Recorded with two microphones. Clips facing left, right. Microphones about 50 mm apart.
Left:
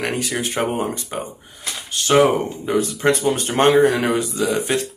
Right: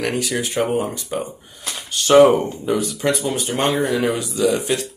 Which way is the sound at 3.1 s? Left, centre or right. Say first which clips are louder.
Left 3 dB; left.